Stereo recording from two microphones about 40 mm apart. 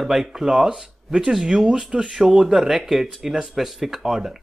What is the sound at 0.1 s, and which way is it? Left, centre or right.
Speech, centre.